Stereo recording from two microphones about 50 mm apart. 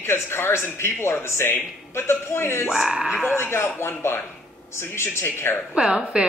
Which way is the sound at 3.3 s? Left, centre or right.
Left.